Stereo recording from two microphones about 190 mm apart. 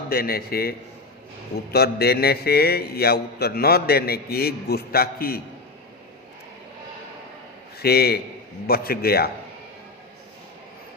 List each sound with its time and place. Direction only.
0.1 s a man's voice: 55° left (ahead or behind)
7.8 s a man's voice: 55° left (ahead or behind)